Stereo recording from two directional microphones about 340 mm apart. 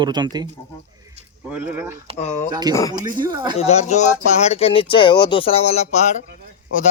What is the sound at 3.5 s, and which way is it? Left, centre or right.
Speech, centre.